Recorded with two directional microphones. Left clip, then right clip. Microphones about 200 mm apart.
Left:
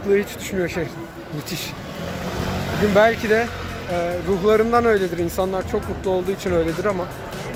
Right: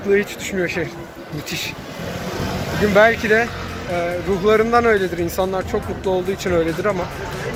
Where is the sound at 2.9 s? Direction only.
15° left (ahead or behind).